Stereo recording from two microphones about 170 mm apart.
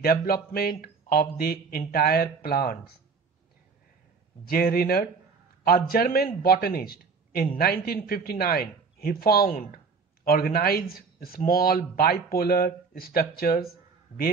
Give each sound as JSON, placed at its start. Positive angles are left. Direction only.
{"t": 0.0, "sound": "speech", "side_deg": 60}
{"t": 4.5, "sound": "a man's voice", "side_deg": 60}